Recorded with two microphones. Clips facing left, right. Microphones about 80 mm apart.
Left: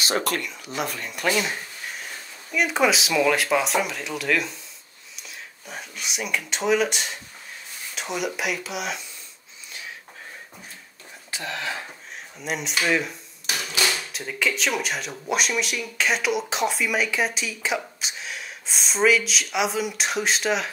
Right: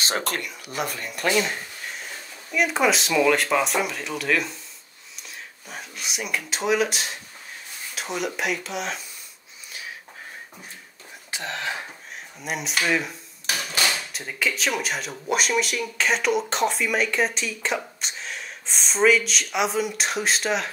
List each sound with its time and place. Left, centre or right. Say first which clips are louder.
0.4 s speech: even; centre
11.2 s speech: even; right
12.4 s speech: even; centre